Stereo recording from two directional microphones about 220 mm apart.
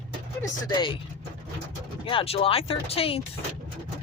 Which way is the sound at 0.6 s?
20° left (ahead or behind).